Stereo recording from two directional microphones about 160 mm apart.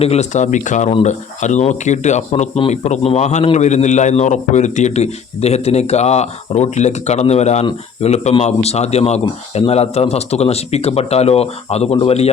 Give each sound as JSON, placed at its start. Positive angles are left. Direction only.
{"t": 0.0, "sound": "a man's voice", "side_deg": 45}